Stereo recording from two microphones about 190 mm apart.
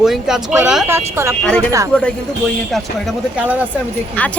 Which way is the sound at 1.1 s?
15° right (ahead or behind).